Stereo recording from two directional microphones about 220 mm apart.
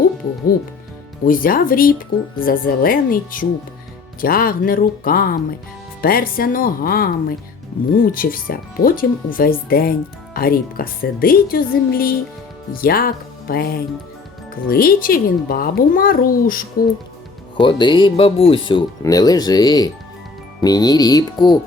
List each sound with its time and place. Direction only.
1.2 s speech: 40° left (ahead or behind)
14.7 s speech: 40° left (ahead or behind)
17.6 s speech: 20° left (ahead or behind)